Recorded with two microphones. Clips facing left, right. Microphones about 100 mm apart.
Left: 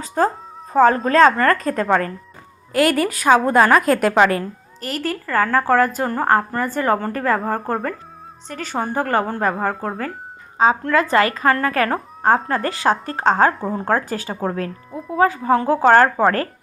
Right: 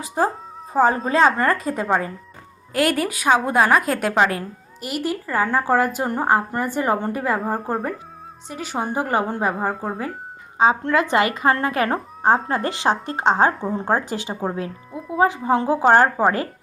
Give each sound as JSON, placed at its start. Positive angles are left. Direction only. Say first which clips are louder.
{"t": 0.0, "sound": "a woman's voice", "louder": "left 2 dB", "side_deg": -15}
{"t": 2.7, "sound": "a woman's voice", "louder": "left 3 dB", "side_deg": 0}
{"t": 10.6, "sound": "a woman's voice", "louder": "left 1 dB", "side_deg": -20}
{"t": 13.5, "sound": "a woman's voice", "louder": "left 1 dB", "side_deg": 0}
{"t": 13.7, "sound": "a woman's voice", "louder": "left 1 dB", "side_deg": -20}